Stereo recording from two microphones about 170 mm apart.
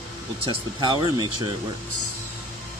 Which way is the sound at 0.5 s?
25° right (ahead or behind).